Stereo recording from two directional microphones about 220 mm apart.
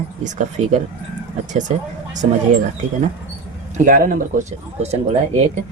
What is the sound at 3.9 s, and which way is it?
Speech, 40° right (ahead or behind).